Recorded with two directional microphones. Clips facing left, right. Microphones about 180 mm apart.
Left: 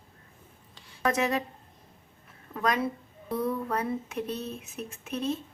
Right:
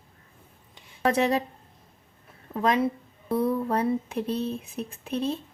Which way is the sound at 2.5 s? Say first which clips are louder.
Right 4 dB; 25° right (ahead or behind).